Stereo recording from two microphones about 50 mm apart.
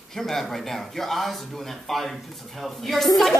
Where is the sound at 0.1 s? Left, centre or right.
Centre.